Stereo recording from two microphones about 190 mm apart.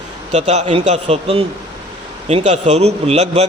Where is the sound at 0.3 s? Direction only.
35° right (ahead or behind).